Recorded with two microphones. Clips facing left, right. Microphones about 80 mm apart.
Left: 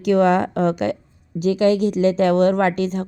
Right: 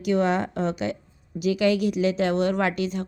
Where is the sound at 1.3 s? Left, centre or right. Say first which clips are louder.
Left 5 dB; left.